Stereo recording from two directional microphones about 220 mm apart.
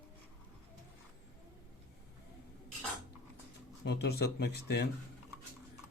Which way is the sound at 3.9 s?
50° left (ahead or behind).